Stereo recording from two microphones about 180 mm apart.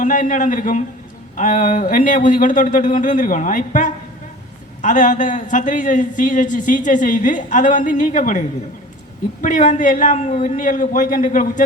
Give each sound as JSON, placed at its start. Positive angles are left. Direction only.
{"t": 0.0, "sound": "a man's voice", "side_deg": 45}